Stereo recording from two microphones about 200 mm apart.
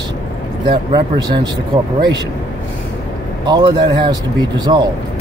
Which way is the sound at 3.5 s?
25° right (ahead or behind).